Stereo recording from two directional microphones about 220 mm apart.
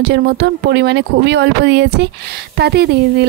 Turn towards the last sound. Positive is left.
turn(degrees=-50)  # may be behind; listen again after turning